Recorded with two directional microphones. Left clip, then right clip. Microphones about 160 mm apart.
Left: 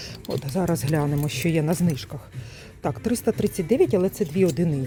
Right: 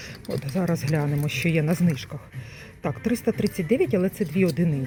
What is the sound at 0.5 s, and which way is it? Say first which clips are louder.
Speech: left 2 dB; 15° left (ahead or behind).